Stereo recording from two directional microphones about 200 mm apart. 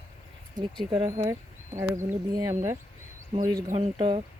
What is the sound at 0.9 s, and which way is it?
Speech, 20° right (ahead or behind).